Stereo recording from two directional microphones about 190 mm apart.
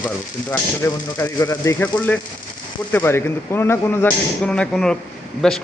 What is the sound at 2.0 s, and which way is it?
Speech, 5° left (ahead or behind).